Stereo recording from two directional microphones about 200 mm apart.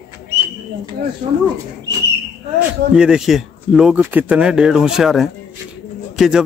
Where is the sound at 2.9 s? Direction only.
5° right (ahead or behind).